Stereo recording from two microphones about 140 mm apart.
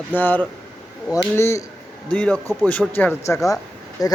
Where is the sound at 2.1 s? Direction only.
5° left (ahead or behind); by 4.1 s 25° left (ahead or behind).